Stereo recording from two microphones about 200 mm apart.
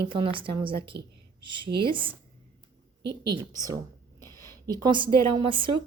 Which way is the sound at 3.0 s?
55° right (ahead or behind).